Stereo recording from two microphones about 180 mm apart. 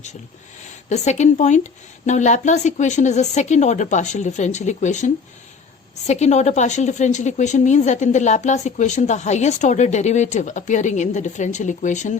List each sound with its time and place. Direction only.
0.9 s speech: 40° left (ahead or behind)